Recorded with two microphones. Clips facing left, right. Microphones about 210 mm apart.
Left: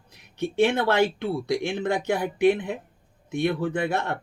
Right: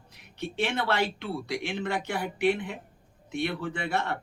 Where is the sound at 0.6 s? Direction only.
45° left (ahead or behind).